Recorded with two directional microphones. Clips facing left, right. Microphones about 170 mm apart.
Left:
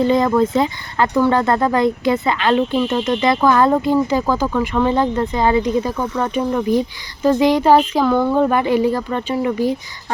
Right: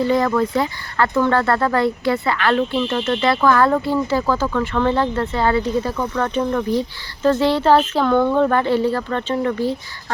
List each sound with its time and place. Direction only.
0.0 s speech: 20° left (ahead or behind)